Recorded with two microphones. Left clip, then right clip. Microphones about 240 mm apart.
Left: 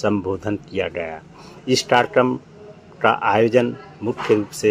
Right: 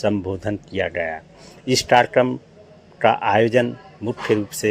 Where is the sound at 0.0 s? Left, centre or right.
Centre.